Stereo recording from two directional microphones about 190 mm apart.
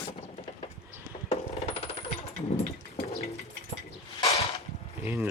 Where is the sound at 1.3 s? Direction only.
30° left (ahead or behind).